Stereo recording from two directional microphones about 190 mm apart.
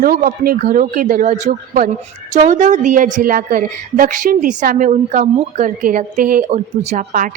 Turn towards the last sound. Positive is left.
turn(degrees=-40)  # may be behind; listen again after turning